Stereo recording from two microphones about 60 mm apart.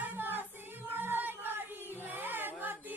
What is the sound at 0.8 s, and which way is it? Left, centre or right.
Music, right.